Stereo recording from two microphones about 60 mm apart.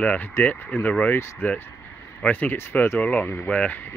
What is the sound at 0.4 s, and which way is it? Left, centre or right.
Speech, left.